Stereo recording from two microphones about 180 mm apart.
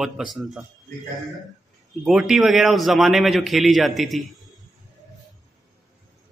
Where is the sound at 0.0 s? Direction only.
Centre (ahead or behind).